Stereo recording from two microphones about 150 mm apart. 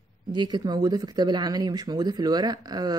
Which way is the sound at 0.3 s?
30° right (ahead or behind).